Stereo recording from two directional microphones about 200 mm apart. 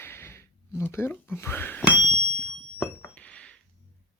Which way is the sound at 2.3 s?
5° left (ahead or behind).